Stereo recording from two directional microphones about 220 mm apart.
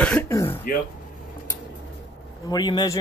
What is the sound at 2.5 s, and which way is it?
Speech, 20° left (ahead or behind).